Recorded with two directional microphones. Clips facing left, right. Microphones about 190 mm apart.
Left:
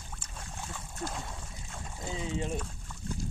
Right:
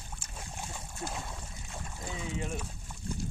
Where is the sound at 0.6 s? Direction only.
20° right (ahead or behind).